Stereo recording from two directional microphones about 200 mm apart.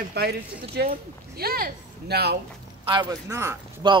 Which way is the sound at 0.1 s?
55° right (ahead or behind).